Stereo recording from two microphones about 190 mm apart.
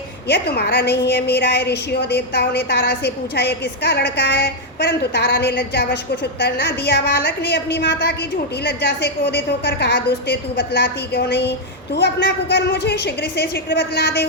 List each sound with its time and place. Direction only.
0.3 s a woman's voice: 60° left (ahead or behind)